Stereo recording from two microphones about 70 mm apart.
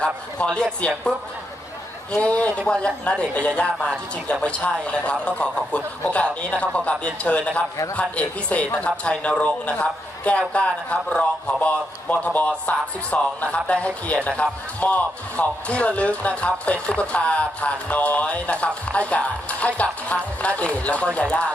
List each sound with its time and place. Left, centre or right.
0.3 s a man's voice: centre
2.1 s a man's voice: centre